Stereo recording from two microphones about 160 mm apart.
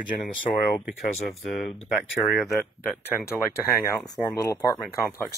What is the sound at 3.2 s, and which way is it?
Speech, 15° left (ahead or behind).